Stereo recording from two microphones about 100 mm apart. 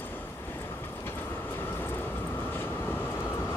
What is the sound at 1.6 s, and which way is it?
Vehicle, 20° left (ahead or behind).